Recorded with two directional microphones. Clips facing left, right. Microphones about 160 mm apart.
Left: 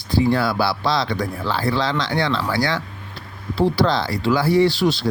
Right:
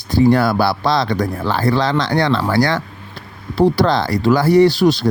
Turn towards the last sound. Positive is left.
turn(degrees=-45)  # may be behind; listen again after turning